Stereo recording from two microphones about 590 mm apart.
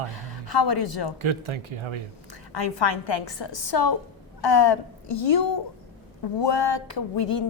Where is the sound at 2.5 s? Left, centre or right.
Left.